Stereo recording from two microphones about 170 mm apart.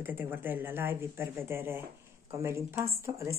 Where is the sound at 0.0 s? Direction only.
10° right (ahead or behind).